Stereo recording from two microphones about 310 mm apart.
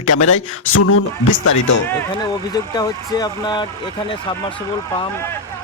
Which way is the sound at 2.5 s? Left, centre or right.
Centre.